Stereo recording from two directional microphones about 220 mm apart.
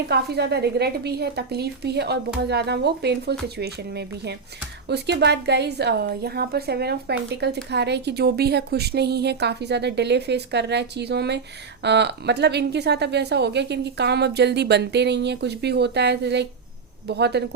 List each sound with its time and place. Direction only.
0.1 s a woman's voice: 50° right (ahead or behind)